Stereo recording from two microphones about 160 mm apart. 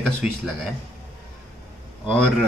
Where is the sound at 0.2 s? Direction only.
5° right (ahead or behind).